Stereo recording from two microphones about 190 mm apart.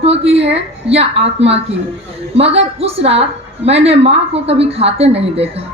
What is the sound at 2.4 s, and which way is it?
A woman's voice, 30° right (ahead or behind).